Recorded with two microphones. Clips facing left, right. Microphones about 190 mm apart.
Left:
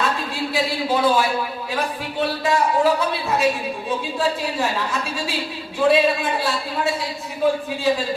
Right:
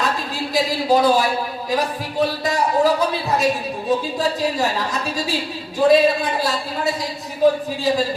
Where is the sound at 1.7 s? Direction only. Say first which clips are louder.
Right 4 dB; 40° right (ahead or behind).